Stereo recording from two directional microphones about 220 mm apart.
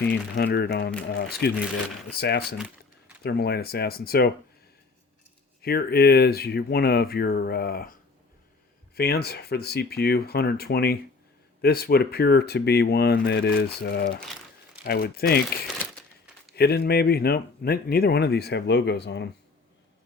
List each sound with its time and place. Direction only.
0.0 s speech: 50° left (ahead or behind)
5.6 s speech: 45° left (ahead or behind)
9.0 s speech: 45° left (ahead or behind)
16.5 s speech: 45° left (ahead or behind)